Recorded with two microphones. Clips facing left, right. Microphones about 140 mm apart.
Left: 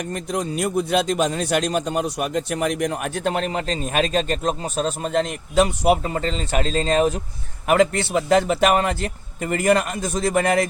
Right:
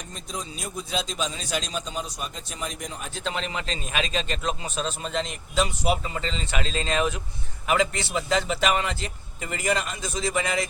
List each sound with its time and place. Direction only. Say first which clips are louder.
0.0 s a man's voice: left 11 dB; 65° left (ahead or behind); by 7.2 s 40° left (ahead or behind)
7.7 s a man's voice: left 7 dB; 55° left (ahead or behind)